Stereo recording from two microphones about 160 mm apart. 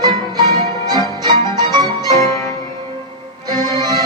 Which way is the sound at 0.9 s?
25° right (ahead or behind).